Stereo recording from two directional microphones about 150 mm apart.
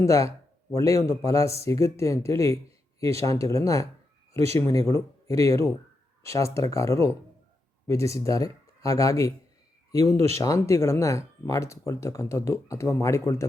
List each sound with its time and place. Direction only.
0.0 s speech: 20° left (ahead or behind)